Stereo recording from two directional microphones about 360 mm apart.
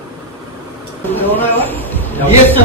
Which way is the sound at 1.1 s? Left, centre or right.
Centre.